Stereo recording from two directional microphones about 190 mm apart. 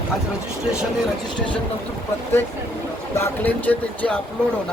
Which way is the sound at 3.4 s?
10° left (ahead or behind).